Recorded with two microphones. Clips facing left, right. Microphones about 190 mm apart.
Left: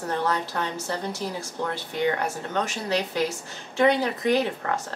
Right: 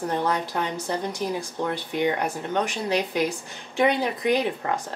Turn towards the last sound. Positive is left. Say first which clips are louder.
# even
turn(degrees=-15)  # may be behind; listen again after turning